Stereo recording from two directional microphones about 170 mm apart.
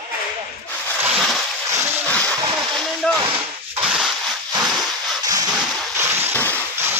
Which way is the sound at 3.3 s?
5° right (ahead or behind).